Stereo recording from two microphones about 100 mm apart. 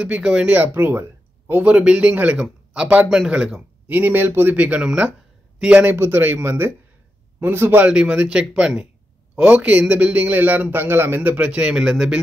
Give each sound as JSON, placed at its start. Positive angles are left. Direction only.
{"t": 0.0, "sound": "a man's voice", "side_deg": -10}
{"t": 4.6, "sound": "a man's voice", "side_deg": -10}